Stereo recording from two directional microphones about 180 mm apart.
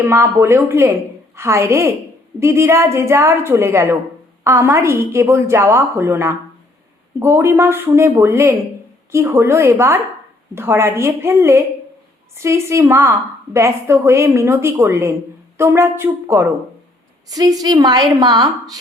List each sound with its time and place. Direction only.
0.0 s a woman's voice: 15° right (ahead or behind)